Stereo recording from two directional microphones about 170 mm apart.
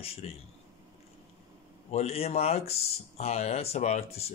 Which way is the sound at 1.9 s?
35° left (ahead or behind).